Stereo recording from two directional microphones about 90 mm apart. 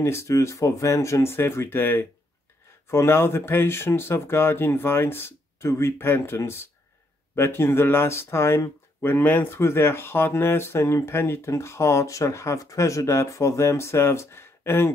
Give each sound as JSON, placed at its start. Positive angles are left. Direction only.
{"t": 0.0, "sound": "speech", "side_deg": 35}